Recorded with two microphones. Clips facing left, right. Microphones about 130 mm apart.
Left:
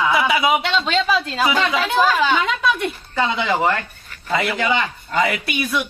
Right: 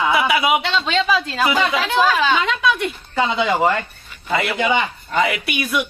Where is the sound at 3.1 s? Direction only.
15° right (ahead or behind).